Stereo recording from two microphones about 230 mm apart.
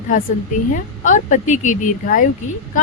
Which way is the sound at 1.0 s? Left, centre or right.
Left.